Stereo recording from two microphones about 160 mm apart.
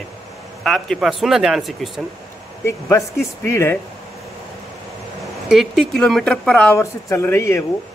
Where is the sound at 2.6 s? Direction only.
20° left (ahead or behind).